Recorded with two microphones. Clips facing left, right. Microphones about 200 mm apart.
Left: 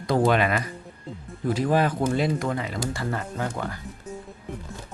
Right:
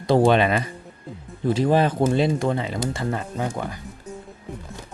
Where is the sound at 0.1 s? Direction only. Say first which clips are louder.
Right 4 dB; 25° right (ahead or behind).